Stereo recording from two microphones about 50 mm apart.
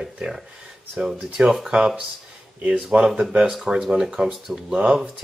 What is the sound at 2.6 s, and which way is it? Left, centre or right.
Speech, right.